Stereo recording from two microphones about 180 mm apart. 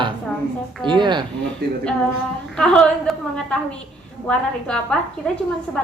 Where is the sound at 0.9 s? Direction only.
25° right (ahead or behind).